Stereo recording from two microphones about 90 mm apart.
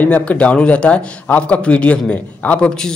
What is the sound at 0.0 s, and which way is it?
A man's voice, 15° left (ahead or behind).